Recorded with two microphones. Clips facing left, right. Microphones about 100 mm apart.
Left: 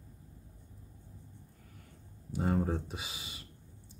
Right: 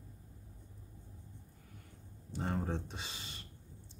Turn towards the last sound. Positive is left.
turn(degrees=5)  # may be behind; listen again after turning